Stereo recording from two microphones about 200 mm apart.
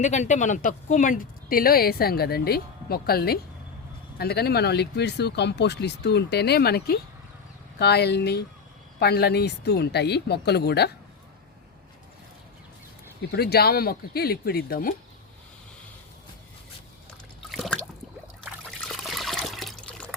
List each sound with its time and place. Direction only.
0.0 s speech: 35° left (ahead or behind); by 10.9 s 55° left (ahead or behind)
13.3 s speech: 50° left (ahead or behind)
17.5 s a sound: centre (ahead or behind)
18.8 s trickle: centre (ahead or behind)